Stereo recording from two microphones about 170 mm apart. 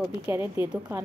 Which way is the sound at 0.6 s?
25° left (ahead or behind).